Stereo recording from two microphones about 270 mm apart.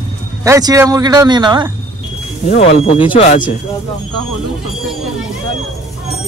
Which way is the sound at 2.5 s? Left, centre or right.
Left.